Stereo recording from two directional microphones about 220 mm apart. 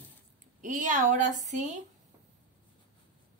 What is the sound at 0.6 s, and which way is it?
A woman's voice, 35° right (ahead or behind).